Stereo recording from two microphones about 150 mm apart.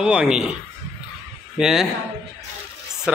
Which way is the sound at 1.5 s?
5° right (ahead or behind).